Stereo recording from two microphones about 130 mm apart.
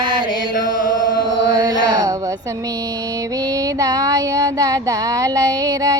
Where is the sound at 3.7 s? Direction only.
30° right (ahead or behind).